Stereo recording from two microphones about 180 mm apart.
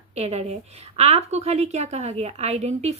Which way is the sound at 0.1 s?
35° right (ahead or behind).